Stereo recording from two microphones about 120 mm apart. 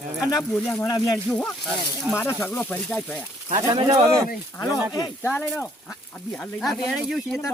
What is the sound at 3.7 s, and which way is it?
Speech, 35° right (ahead or behind).